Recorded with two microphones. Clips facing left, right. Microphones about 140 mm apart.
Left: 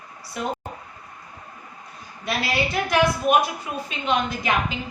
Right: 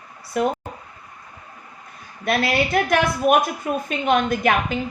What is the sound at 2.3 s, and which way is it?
Speech, 55° right (ahead or behind).